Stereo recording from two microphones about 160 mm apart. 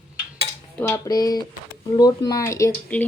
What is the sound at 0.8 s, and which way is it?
Speech, 20° left (ahead or behind).